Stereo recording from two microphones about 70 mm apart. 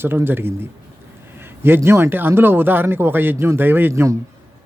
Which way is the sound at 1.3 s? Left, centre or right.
Right.